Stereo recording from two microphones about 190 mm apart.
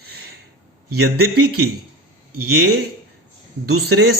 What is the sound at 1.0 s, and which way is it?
Speech, 55° right (ahead or behind).